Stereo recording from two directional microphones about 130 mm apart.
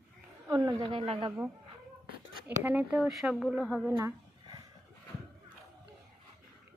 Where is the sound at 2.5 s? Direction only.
15° right (ahead or behind).